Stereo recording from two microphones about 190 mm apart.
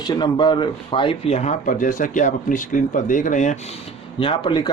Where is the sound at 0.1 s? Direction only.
25° left (ahead or behind); by 3.6 s 40° left (ahead or behind).